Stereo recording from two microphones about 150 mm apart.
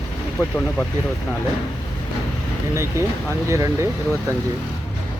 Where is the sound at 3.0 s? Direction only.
20° right (ahead or behind).